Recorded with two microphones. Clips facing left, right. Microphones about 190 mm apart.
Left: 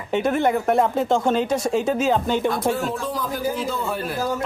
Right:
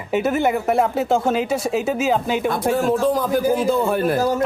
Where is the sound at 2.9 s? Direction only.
50° right (ahead or behind).